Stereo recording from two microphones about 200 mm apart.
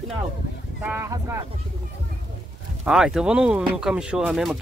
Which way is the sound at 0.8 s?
10° right (ahead or behind).